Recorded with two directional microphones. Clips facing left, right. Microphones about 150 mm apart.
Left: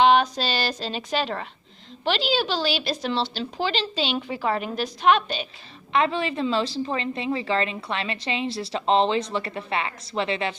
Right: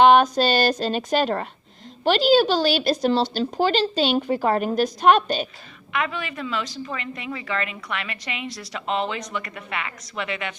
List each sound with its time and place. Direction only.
0.0 s a woman's voice: 50° right (ahead or behind)
5.9 s a woman's voice: 30° left (ahead or behind)